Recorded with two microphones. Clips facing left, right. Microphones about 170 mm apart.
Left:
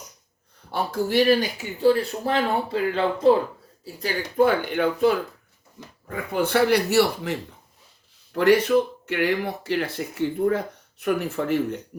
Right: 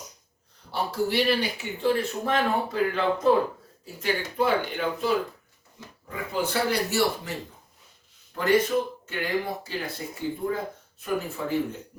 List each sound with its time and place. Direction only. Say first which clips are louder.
0.7 s speech: left 3 dB; 50° left (ahead or behind); by 3.3 s 30° left (ahead or behind)
4.0 s speech: left 5 dB; 50° left (ahead or behind); by 11.8 s 75° left (ahead or behind)